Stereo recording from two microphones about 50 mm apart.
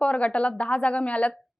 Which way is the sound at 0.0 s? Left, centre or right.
Left.